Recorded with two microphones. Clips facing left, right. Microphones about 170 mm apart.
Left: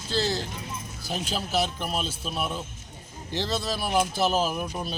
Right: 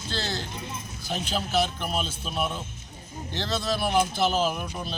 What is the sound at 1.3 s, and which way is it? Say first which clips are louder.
Speech: right 2 dB; 5° left (ahead or behind).